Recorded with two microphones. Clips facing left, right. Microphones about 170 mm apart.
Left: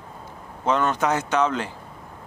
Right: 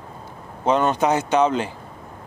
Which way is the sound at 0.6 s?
20° right (ahead or behind).